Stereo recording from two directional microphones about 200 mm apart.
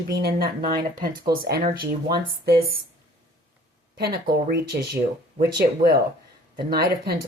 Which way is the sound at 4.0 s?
50° right (ahead or behind).